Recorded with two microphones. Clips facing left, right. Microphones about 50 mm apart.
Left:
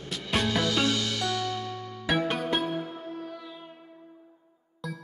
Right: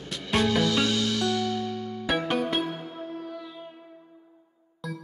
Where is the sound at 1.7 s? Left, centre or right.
Left.